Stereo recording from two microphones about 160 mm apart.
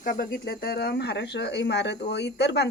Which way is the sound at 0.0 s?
65° left (ahead or behind).